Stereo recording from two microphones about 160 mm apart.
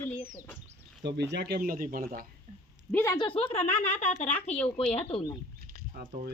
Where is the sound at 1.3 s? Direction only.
85° right; by 2.2 s 65° right (ahead or behind).